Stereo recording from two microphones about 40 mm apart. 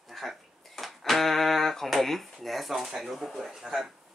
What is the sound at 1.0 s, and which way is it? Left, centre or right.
Speech, centre.